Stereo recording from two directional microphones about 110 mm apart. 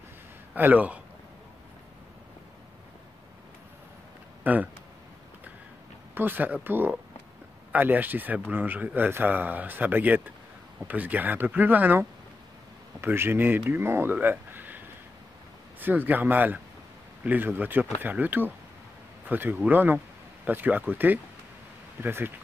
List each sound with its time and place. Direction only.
0.6 s speech: 15° right (ahead or behind)
4.4 s a sound: 15° right (ahead or behind)
6.1 s speech: 20° right (ahead or behind)
15.8 s speech: 15° right (ahead or behind)